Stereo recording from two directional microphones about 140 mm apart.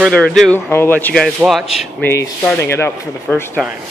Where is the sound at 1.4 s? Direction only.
Centre (ahead or behind).